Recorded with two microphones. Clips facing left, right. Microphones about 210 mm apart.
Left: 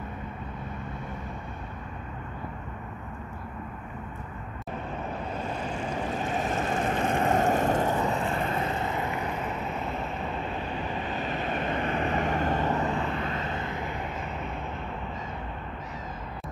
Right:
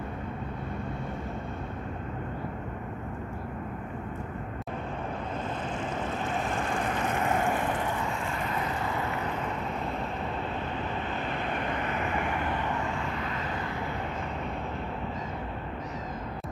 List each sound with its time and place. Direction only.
5.8 s vehicle: 10° left (ahead or behind)
11.0 s vehicle: 15° left (ahead or behind)